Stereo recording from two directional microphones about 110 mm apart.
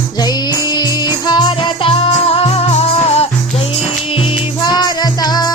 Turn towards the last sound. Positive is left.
turn(degrees=40)  # may be behind; listen again after turning